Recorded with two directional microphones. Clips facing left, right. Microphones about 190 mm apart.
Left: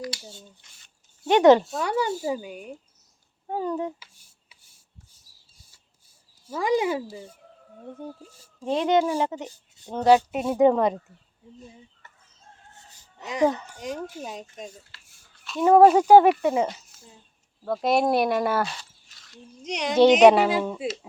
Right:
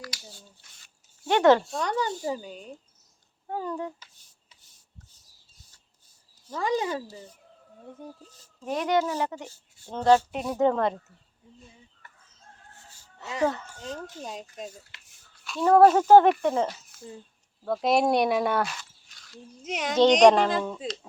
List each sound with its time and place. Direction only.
0.0 s speech: 25° left (ahead or behind)
1.6 s speech: 5° left (ahead or behind)
4.0 s rub: 10° left (ahead or behind)
6.5 s speech: 10° left (ahead or behind)
8.6 s speech: 25° left (ahead or behind)
9.0 s speech: 15° left (ahead or behind)
12.9 s speech: 15° left (ahead or behind)
14.9 s a sound: 20° right (ahead or behind)
15.6 s speech: 10° left (ahead or behind)
17.8 s a child's voice: centre (ahead or behind)